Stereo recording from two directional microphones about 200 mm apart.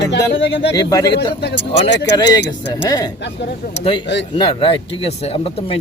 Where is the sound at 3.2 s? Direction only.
60° left (ahead or behind).